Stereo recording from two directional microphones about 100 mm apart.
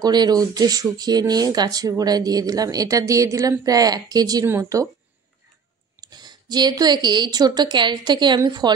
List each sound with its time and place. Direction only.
0.0 s speech: 45° right (ahead or behind)
5.9 s a woman's voice: 45° right (ahead or behind)